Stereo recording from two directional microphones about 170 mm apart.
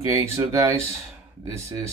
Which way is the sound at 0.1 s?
15° right (ahead or behind).